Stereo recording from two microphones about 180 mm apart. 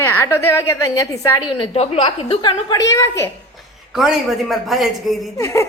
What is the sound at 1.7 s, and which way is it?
A woman's voice, 30° left (ahead or behind).